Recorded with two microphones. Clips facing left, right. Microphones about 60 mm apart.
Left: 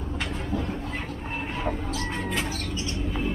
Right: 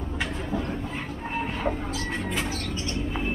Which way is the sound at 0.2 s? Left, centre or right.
Centre.